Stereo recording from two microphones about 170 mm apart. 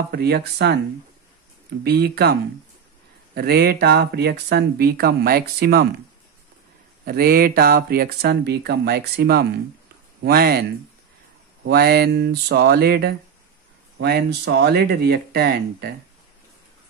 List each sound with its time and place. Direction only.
0.1 s speech: 70° right (ahead or behind)
1.9 s speech: 70° right (ahead or behind)
3.3 s speech: 65° right (ahead or behind)
7.1 s speech: 60° right (ahead or behind)
13.9 s speech: 80° right